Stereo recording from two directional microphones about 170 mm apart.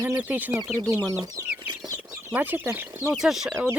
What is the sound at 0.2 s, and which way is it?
Speech, 10° right (ahead or behind).